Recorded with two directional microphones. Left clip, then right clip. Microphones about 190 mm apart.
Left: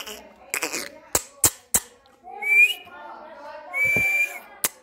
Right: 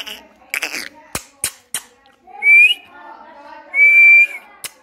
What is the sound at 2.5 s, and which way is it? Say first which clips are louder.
Whistling: right 8 dB; 25° left (ahead or behind).